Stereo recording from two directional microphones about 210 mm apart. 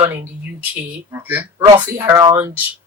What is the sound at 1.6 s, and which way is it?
Speech, 20° right (ahead or behind).